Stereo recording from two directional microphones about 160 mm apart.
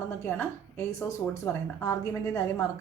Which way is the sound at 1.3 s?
15° left (ahead or behind).